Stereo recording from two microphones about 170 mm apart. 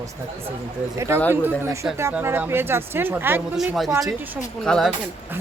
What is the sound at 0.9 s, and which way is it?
A woman's voice, 15° right (ahead or behind).